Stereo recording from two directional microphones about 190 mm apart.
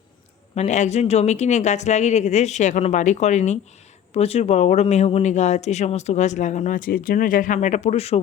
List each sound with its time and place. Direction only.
0.5 s speech: 40° left (ahead or behind)